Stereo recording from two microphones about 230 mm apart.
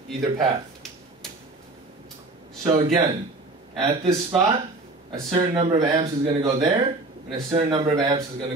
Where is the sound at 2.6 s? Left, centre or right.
Right.